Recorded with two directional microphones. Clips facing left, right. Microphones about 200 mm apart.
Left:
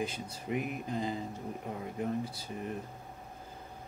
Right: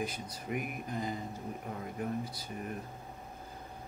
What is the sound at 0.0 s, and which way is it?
Speech, 25° left (ahead or behind).